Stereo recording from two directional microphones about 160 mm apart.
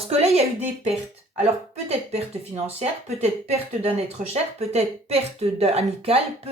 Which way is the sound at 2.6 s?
40° right (ahead or behind).